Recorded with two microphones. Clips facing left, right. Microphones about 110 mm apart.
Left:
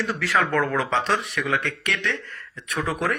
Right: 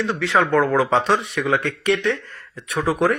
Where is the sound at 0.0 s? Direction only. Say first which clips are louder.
Right 4 dB; 30° right (ahead or behind).